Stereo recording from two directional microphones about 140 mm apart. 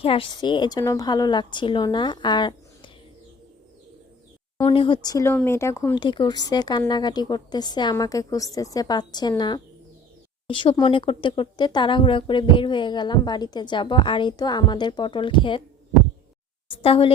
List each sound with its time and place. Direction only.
0.0 s speech: 40° left (ahead or behind)
4.6 s speech: 40° left (ahead or behind)
5.0 s a woman's voice: 25° left (ahead or behind)
5.9 s a woman's voice: 35° left (ahead or behind)
10.5 s speech: 35° left (ahead or behind)
16.6 s speech: 40° left (ahead or behind)